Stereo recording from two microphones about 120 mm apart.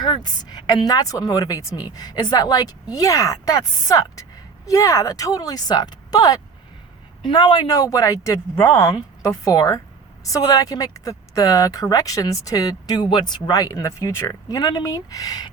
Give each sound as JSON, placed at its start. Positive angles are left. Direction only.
{"t": 0.0, "sound": "a woman's voice", "side_deg": 35}